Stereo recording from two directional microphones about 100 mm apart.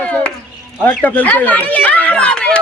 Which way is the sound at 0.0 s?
10° left (ahead or behind).